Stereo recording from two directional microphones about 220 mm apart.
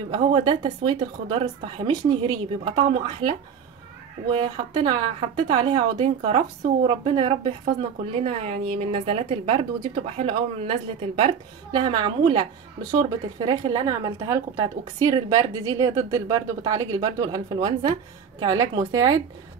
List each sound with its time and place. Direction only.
0.1 s a woman's voice: 20° right (ahead or behind)